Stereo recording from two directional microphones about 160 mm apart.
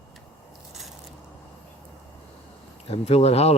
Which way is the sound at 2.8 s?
40° left (ahead or behind).